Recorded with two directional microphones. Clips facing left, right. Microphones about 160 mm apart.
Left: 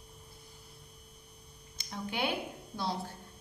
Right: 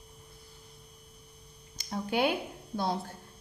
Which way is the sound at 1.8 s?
40° right (ahead or behind).